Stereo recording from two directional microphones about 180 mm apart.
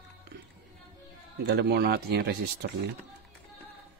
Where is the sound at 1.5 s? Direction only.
65° right (ahead or behind).